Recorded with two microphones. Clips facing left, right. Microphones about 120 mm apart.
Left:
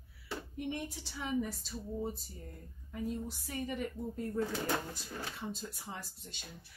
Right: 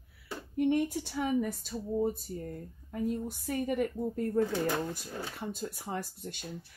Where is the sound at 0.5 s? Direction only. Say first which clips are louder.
Right 13 dB; 55° right (ahead or behind).